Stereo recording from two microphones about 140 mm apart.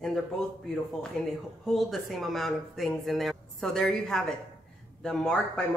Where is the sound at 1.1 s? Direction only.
5° left (ahead or behind).